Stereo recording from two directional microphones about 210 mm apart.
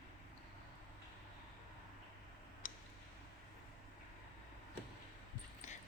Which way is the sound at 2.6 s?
40° left (ahead or behind).